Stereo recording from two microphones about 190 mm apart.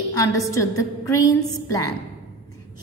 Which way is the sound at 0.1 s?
15° left (ahead or behind).